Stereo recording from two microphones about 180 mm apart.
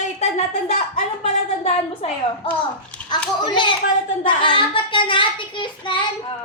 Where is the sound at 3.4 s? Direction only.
25° left (ahead or behind).